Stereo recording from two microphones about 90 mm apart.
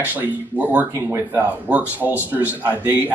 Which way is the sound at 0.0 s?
20° right (ahead or behind).